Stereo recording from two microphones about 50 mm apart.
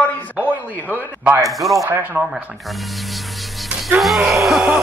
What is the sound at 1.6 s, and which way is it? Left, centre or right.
Speech, right.